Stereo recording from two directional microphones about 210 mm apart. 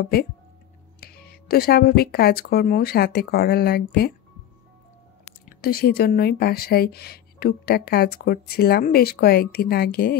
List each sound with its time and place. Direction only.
0.0 s speech: 50° left (ahead or behind)
5.6 s speech: 45° left (ahead or behind)